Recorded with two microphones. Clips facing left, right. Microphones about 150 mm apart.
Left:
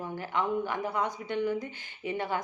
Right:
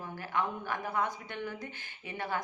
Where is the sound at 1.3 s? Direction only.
15° left (ahead or behind).